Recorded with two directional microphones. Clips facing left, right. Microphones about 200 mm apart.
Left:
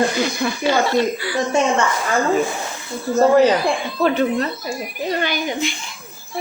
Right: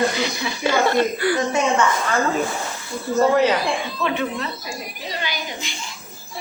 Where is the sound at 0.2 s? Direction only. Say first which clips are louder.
Left 4 dB; 55° left (ahead or behind).